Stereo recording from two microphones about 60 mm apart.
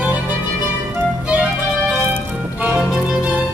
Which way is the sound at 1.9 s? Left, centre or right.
Right.